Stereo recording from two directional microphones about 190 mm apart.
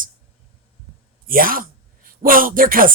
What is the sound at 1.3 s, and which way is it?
Speech, 50° right (ahead or behind).